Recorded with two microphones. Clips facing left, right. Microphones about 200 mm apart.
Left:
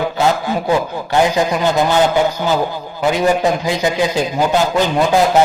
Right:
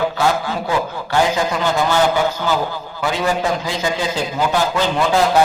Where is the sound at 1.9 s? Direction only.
20° left (ahead or behind).